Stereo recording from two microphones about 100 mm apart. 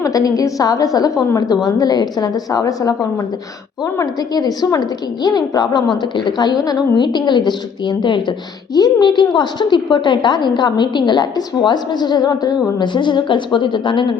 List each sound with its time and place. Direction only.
0.0 s a woman's voice: 35° left (ahead or behind)
4.2 s a woman's voice: 40° left (ahead or behind)